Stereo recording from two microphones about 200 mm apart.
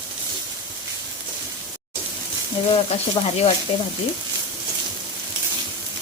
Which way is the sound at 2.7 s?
30° left (ahead or behind).